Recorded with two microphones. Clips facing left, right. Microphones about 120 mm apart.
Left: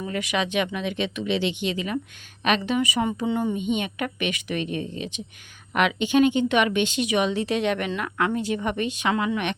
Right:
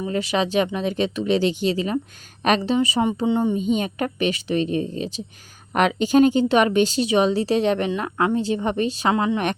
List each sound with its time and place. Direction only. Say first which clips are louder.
0.0 s a woman's voice: right 4 dB; 30° right (ahead or behind)